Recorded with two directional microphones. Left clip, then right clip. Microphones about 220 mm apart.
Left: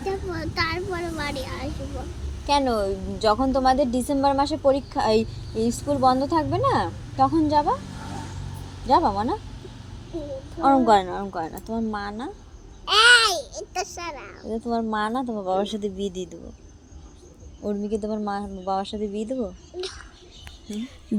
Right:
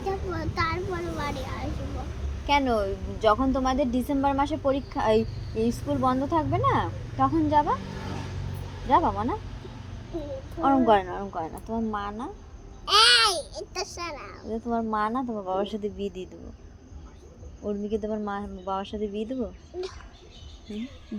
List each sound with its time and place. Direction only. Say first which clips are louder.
0.0 s a sound: left 2 dB; 10° right (ahead or behind)
2.5 s a woman's voice: left 2 dB; 30° left (ahead or behind)
8.9 s a woman's voice: left 3 dB; 25° left (ahead or behind)
10.8 s a woman's voice: left 3 dB; 30° left (ahead or behind)
12.8 s babbling: left 3 dB; 5° right (ahead or behind)
14.5 s a woman's voice: left 2 dB; 25° left (ahead or behind)
17.6 s a woman's voice: left 2 dB; 20° left (ahead or behind)